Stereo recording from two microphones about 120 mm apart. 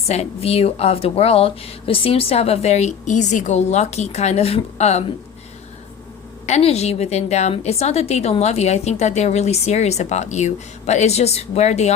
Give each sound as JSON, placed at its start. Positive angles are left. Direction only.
{"t": 0.1, "sound": "a woman's voice", "side_deg": 60}
{"t": 6.4, "sound": "a woman's voice", "side_deg": 60}